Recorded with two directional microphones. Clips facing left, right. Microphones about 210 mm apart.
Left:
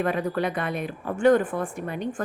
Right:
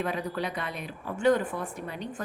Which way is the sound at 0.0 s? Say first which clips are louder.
Left 6 dB; 55° left (ahead or behind).